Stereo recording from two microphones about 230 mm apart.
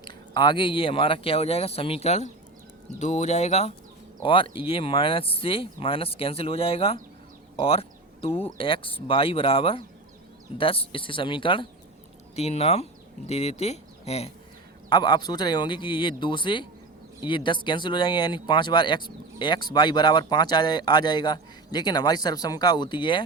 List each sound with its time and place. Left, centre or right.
0.0 s speech: centre